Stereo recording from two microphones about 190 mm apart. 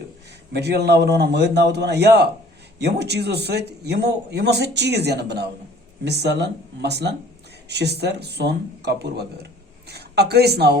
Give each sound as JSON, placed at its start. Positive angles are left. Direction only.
{"t": 0.5, "sound": "speech", "side_deg": -60}